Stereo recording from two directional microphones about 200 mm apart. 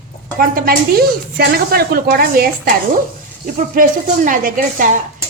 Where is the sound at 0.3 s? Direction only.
45° right (ahead or behind).